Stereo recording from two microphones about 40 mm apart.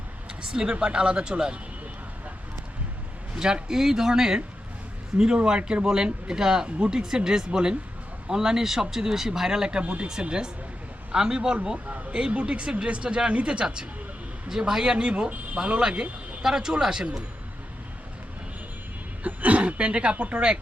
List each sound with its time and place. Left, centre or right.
0.3 s speech: right
3.3 s speech: centre
9.8 s speech: right
10.2 s speech: right
11.9 s a sound: right
12.1 s speech: right
19.2 s speech: right